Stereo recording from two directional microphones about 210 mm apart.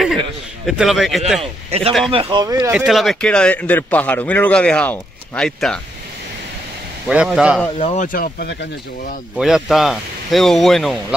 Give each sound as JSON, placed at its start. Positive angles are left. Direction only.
{"t": 0.7, "sound": "speech", "side_deg": 0}
{"t": 1.4, "sound": "speech", "side_deg": -30}
{"t": 2.7, "sound": "speech", "side_deg": -5}
{"t": 7.1, "sound": "speech", "side_deg": -5}
{"t": 7.8, "sound": "speech", "side_deg": 35}
{"t": 9.4, "sound": "speech", "side_deg": 0}